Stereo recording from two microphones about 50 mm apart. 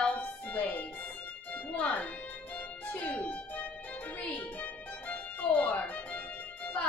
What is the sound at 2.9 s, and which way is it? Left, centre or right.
Speech, left.